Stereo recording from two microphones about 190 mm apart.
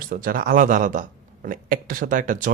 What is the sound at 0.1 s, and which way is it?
Speech, 50° right (ahead or behind).